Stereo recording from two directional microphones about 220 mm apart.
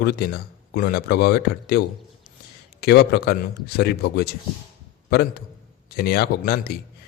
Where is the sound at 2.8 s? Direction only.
45° left (ahead or behind).